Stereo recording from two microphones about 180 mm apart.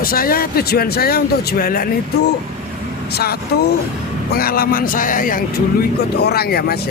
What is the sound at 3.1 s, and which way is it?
Speech, 60° left (ahead or behind).